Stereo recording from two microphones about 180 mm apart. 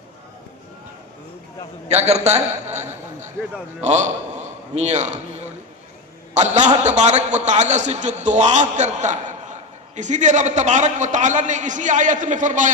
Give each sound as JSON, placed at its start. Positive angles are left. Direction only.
{"t": 1.9, "sound": "a man's voice", "side_deg": -35}